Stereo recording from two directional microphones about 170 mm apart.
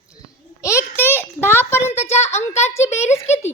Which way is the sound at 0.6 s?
15° left (ahead or behind).